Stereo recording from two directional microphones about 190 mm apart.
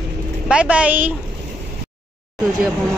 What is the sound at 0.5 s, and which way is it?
Speech, 5° right (ahead or behind).